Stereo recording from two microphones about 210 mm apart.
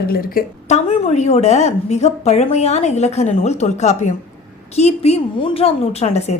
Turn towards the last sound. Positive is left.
turn(degrees=30)  # may be behind; listen again after turning